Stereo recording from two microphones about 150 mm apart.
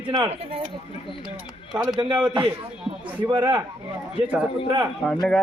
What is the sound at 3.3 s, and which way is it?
Speech, 30° right (ahead or behind).